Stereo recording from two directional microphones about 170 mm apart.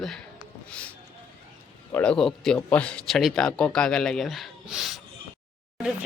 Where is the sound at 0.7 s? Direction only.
5° left (ahead or behind).